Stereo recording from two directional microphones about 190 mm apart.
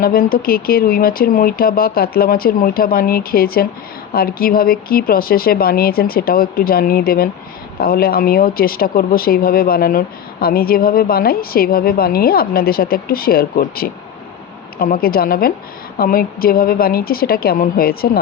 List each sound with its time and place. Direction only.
0.0 s speech: 50° left (ahead or behind)